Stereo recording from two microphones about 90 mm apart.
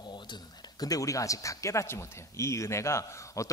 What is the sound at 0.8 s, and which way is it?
Speech, 40° left (ahead or behind).